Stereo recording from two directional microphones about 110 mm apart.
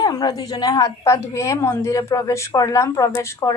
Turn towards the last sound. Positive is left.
turn(degrees=25)  # may be behind; listen again after turning